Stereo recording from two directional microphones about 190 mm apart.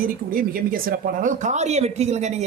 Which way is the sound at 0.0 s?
50° right (ahead or behind).